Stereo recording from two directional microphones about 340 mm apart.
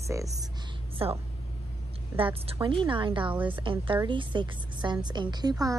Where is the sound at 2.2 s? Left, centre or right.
Centre.